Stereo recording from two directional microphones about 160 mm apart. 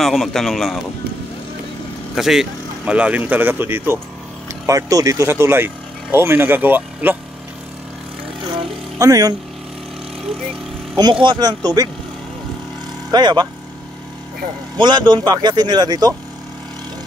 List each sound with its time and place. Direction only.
0.0 s a man's voice: centre (ahead or behind)
2.1 s speech: 5° right (ahead or behind)
8.9 s speech: 20° right (ahead or behind)
11.0 s speech: 30° right (ahead or behind)
13.1 s speech: 25° right (ahead or behind)
14.8 s speech: 30° right (ahead or behind)